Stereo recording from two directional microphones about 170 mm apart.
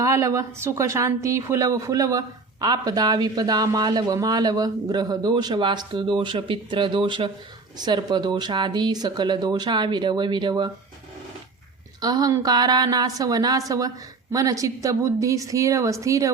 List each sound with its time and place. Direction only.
0.0 s a woman's voice: 20° right (ahead or behind)
11.9 s a woman's voice: 25° right (ahead or behind)